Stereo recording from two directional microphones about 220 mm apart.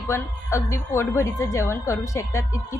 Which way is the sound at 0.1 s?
15° left (ahead or behind).